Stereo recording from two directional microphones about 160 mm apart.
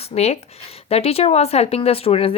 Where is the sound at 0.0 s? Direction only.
40° left (ahead or behind).